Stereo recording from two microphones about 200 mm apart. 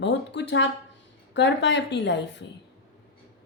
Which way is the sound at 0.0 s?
60° left (ahead or behind).